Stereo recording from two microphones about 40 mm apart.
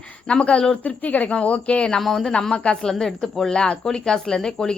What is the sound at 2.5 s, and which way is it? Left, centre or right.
Speech, left.